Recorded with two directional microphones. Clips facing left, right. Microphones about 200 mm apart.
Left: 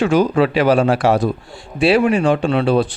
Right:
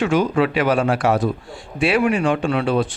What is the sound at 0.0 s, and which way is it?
Speech, 35° left (ahead or behind).